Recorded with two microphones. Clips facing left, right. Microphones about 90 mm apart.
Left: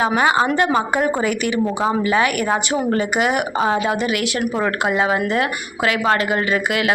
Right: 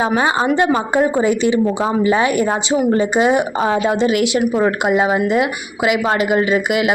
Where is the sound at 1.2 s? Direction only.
25° right (ahead or behind).